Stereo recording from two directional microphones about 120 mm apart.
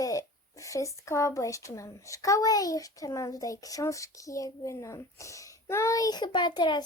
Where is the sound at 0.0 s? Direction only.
30° left (ahead or behind).